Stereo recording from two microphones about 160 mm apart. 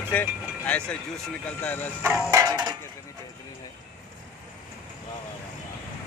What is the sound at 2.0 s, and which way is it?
Music, 10° right (ahead or behind).